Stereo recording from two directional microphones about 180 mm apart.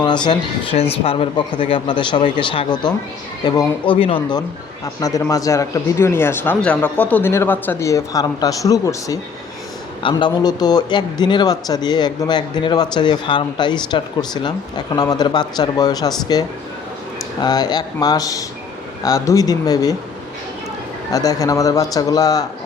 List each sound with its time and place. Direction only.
0.3 s a man's voice: 30° left (ahead or behind)
21.1 s a man's voice: 20° left (ahead or behind)